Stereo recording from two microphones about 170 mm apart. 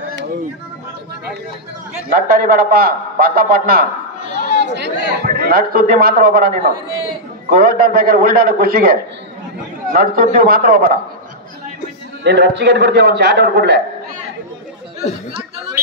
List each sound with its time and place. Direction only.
2.0 s a man's voice: 60° right (ahead or behind)
4.6 s a man's voice: 90° right; by 8.9 s 60° right (ahead or behind)
9.9 s a man's voice: 60° right (ahead or behind)
12.2 s a man's voice: 90° right